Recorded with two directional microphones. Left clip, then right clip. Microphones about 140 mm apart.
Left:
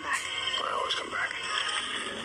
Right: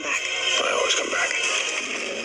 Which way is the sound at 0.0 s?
25° right (ahead or behind).